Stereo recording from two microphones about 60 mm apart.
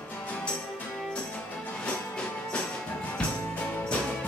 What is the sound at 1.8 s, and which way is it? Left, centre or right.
Music, centre.